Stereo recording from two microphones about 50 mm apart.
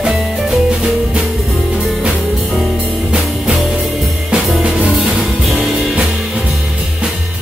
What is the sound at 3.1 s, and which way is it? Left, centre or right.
Music, centre.